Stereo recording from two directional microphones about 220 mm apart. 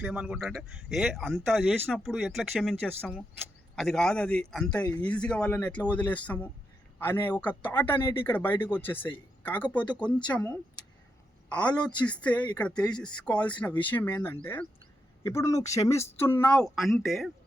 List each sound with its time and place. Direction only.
0.0 s a man's voice: 5° right (ahead or behind)